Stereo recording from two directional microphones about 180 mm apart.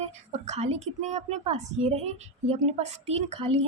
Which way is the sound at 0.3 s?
40° right (ahead or behind).